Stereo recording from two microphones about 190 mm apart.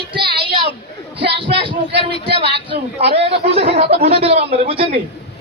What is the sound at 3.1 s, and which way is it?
Speech, 65° right (ahead or behind).